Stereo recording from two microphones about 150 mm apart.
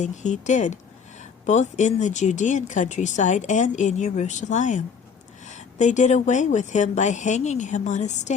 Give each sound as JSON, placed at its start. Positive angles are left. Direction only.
{"t": 0.0, "sound": "speech", "side_deg": 55}